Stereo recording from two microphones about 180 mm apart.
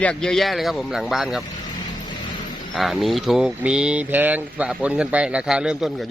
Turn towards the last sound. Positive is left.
turn(degrees=-5)  # may be behind; listen again after turning